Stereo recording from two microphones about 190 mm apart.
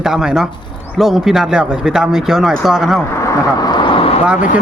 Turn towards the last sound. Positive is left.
turn(degrees=-5)  # may be behind; listen again after turning